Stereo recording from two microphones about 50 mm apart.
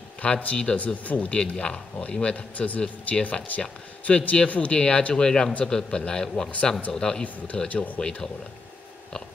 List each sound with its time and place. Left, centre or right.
0.2 s a man's voice: left
1.7 s a man's voice: centre
7.5 s a man's voice: left
8.0 s a man's voice: centre